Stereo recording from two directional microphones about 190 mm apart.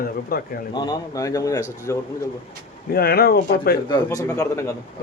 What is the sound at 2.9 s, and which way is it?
Speech, 55° left (ahead or behind).